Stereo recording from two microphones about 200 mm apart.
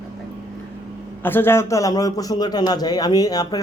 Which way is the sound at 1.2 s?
10° left (ahead or behind).